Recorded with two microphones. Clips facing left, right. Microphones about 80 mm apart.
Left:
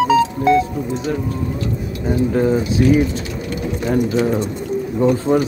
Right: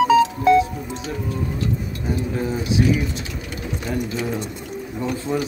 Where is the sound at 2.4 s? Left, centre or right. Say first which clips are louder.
Left 5 dB; left.